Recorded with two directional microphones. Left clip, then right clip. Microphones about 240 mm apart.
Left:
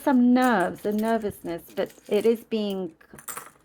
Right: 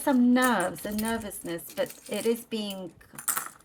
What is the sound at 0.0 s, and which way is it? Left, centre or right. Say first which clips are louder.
Speech: left 3 dB; left.